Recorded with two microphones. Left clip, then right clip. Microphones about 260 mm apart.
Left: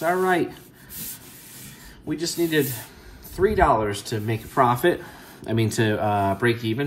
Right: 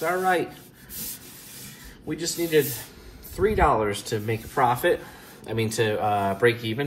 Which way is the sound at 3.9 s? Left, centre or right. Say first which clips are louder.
Even; centre.